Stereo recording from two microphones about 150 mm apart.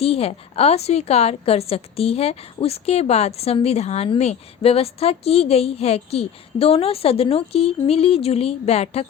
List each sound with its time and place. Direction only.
0.0 s a woman's voice: 40° left (ahead or behind)